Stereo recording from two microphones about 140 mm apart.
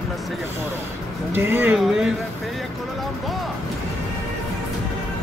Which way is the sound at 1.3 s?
15° right (ahead or behind).